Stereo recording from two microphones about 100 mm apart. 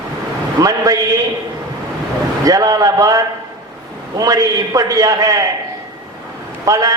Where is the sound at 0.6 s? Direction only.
40° right (ahead or behind).